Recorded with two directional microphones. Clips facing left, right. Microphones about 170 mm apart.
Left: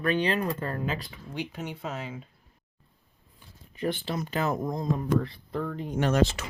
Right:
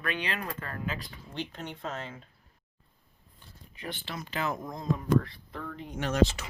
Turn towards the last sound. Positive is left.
turn(degrees=60)  # may be behind; listen again after turning